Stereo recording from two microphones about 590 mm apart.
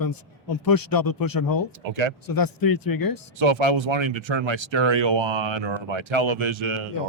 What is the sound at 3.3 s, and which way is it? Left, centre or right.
Speech, right.